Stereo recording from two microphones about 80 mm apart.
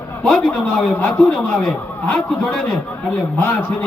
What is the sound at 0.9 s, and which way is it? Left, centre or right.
Speech, left.